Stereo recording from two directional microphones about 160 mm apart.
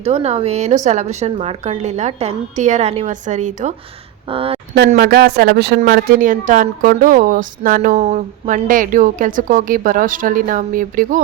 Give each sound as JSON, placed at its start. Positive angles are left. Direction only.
{"t": 0.0, "sound": "speech", "side_deg": -40}
{"t": 4.3, "sound": "speech", "side_deg": -35}
{"t": 4.9, "sound": "a woman's voice", "side_deg": -70}
{"t": 7.9, "sound": "a woman's voice", "side_deg": -45}